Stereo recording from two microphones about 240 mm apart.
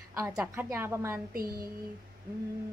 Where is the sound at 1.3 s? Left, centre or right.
Right.